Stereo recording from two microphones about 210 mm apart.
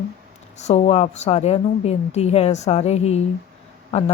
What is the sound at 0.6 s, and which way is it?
A woman's voice, 30° left (ahead or behind).